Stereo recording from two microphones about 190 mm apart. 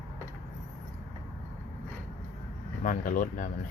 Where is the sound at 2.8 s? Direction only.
45° left (ahead or behind).